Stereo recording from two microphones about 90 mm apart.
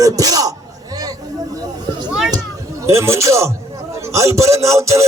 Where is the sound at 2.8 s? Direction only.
30° right (ahead or behind).